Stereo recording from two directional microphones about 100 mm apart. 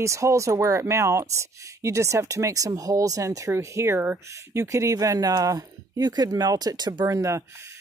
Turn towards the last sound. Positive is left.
turn(degrees=-30)  # may be behind; listen again after turning